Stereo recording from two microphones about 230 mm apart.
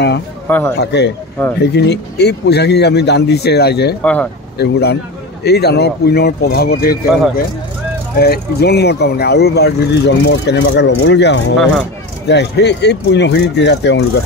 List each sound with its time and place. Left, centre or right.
0.5 s a man's voice: centre
0.7 s speech: left
4.0 s speech: centre
4.6 s speech: left